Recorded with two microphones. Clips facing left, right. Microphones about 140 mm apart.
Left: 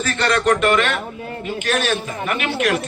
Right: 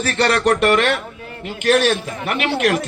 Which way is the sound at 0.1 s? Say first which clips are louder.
Right 1 dB; 65° right (ahead or behind).